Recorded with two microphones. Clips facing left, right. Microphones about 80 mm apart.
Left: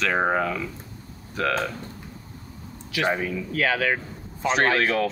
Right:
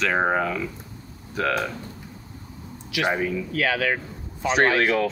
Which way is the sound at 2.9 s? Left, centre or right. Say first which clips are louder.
Right 1 dB; left.